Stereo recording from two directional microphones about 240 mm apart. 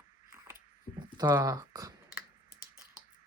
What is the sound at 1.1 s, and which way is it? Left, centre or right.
Speech, centre.